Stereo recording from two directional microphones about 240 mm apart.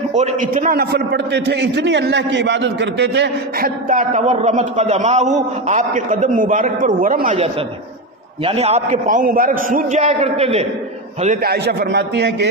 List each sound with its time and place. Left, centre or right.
0.1 s a man's voice: right
11.2 s a man's voice: right